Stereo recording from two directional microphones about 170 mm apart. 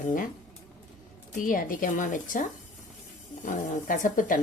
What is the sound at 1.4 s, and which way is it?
Speech, 55° left (ahead or behind).